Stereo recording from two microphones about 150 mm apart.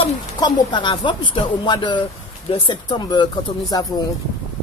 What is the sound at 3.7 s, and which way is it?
Speech, 25° left (ahead or behind).